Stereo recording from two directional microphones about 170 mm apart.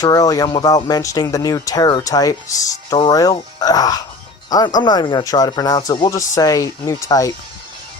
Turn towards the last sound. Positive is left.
turn(degrees=20)  # may be behind; listen again after turning